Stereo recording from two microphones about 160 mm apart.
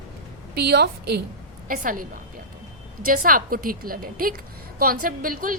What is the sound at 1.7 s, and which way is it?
Speech, 60° right (ahead or behind).